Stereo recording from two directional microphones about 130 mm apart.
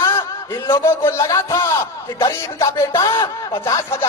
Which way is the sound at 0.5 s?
20° left (ahead or behind).